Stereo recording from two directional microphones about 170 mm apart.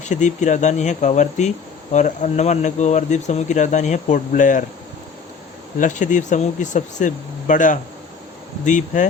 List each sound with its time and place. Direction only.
0.0 s speech: 45° left (ahead or behind)
5.8 s speech: 45° left (ahead or behind)